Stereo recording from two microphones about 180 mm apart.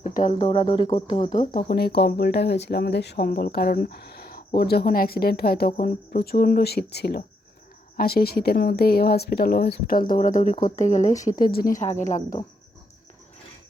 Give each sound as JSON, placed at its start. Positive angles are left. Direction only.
{"t": 0.0, "sound": "music", "side_deg": 45}
{"t": 0.3, "sound": "music", "side_deg": 30}
{"t": 1.6, "sound": "speech", "side_deg": 65}
{"t": 11.2, "sound": "speech", "side_deg": 55}
{"t": 11.8, "sound": "music", "side_deg": 40}